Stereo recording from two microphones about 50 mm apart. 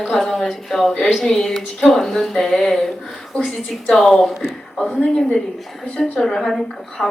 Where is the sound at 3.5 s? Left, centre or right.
Centre.